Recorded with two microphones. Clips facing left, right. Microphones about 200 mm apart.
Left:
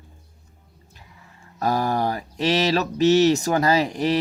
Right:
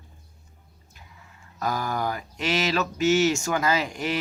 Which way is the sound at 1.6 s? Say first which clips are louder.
Left 5 dB; 35° left (ahead or behind).